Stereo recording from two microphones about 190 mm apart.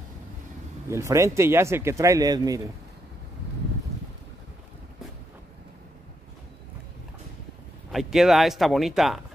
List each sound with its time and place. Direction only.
0.8 s speech: 15° right (ahead or behind)
7.9 s speech: centre (ahead or behind)